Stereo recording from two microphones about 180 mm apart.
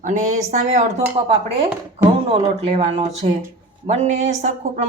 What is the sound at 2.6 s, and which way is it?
Speech, 35° right (ahead or behind).